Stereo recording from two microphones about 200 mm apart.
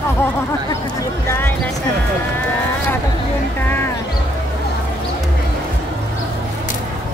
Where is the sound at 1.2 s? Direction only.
10° left (ahead or behind).